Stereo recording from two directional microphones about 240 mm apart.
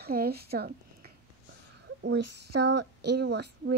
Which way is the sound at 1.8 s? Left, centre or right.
Right.